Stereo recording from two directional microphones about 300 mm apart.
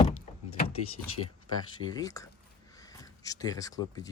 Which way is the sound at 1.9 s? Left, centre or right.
Centre.